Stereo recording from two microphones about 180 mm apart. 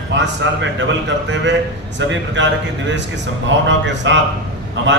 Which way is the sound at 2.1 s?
90° right.